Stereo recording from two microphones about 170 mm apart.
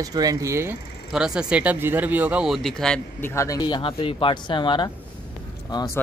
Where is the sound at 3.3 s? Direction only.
20° left (ahead or behind).